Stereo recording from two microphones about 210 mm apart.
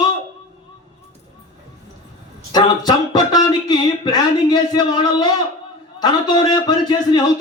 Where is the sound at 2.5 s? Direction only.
20° left (ahead or behind).